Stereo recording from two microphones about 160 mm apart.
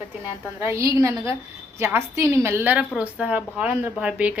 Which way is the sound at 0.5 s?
15° right (ahead or behind).